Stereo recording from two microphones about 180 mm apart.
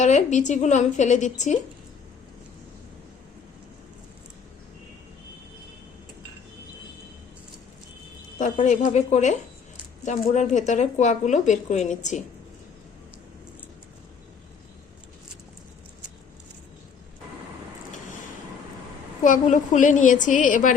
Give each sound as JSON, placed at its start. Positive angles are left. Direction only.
{"t": 0.0, "sound": "speech", "side_deg": 40}
{"t": 8.4, "sound": "speech", "side_deg": 40}
{"t": 19.2, "sound": "a woman's voice", "side_deg": 45}